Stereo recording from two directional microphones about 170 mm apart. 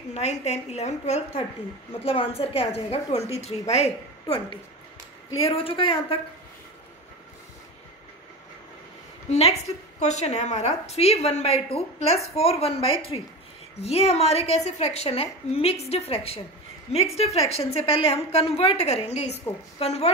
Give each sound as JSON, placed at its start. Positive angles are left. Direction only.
{"t": 0.1, "sound": "a woman's voice", "side_deg": 40}
{"t": 9.3, "sound": "a woman's voice", "side_deg": 40}